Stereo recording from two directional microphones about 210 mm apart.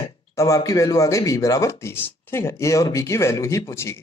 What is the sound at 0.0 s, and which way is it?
Speech, 15° left (ahead or behind).